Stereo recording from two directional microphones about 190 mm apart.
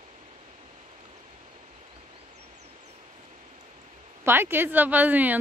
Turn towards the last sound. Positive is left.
turn(degrees=-10)  # may be behind; listen again after turning